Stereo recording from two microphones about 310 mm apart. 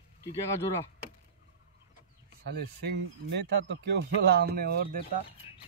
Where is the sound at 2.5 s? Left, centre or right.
Right.